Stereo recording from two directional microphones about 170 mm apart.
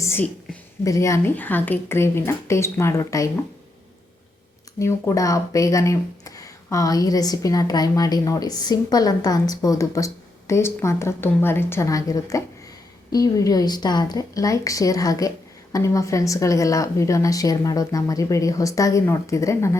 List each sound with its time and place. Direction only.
0.0 s a sound: 15° left (ahead or behind)
0.9 s speech: 20° left (ahead or behind)
4.8 s speech: 15° left (ahead or behind)